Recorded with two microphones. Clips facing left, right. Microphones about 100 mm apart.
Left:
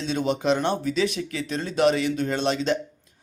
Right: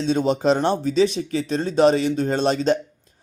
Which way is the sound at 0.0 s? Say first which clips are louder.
Right 5 dB; 35° right (ahead or behind).